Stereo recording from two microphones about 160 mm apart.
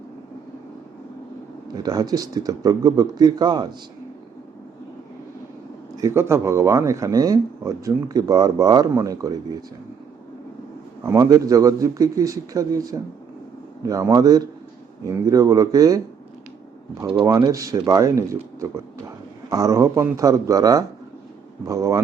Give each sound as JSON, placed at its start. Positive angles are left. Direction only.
{"t": 1.6, "sound": "speech", "side_deg": -25}
{"t": 6.0, "sound": "speech", "side_deg": -20}
{"t": 11.0, "sound": "speech", "side_deg": -20}
{"t": 17.2, "sound": "speech", "side_deg": -20}